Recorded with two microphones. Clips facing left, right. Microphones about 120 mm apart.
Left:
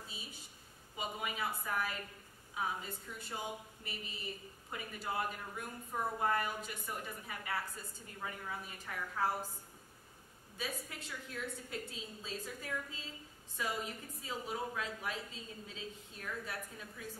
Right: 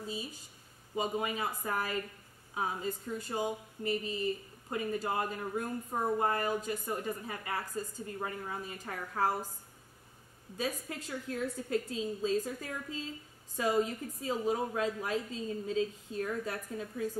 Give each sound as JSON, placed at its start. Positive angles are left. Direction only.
{"t": 0.1, "sound": "speech", "side_deg": -40}
{"t": 10.6, "sound": "speech", "side_deg": -40}